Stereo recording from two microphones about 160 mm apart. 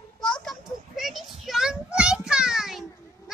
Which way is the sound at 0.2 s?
Centre (ahead or behind).